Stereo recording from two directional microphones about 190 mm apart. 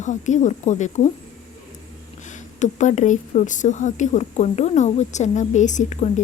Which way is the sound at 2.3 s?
40° left (ahead or behind).